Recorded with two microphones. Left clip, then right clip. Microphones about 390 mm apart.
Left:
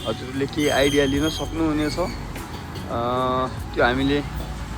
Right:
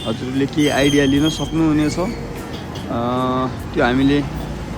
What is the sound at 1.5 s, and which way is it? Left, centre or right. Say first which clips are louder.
Speech: right 7 dB; right.